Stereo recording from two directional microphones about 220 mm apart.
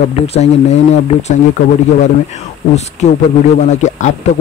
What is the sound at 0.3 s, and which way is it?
Speech, 30° left (ahead or behind).